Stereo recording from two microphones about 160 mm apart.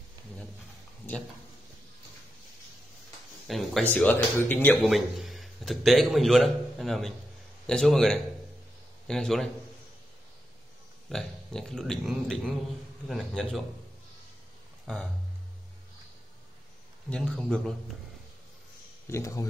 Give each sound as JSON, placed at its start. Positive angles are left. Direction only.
{"t": 3.4, "sound": "speech", "side_deg": 0}
{"t": 4.8, "sound": "a man's voice", "side_deg": 0}
{"t": 11.1, "sound": "speech", "side_deg": 5}
{"t": 17.1, "sound": "speech", "side_deg": 5}
{"t": 19.0, "sound": "speech", "side_deg": 20}